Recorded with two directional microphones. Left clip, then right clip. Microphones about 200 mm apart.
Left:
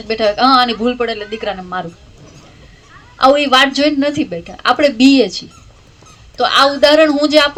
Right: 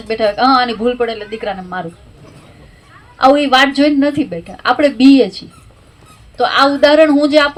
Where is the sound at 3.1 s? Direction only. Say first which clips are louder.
Even; 25° left (ahead or behind).